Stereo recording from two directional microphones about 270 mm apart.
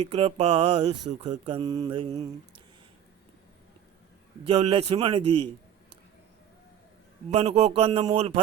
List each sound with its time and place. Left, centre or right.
0.0 s mantra: right
4.4 s mantra: right
7.3 s mantra: right